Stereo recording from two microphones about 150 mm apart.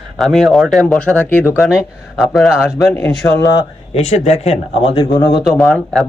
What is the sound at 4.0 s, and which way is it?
Speech, 45° left (ahead or behind).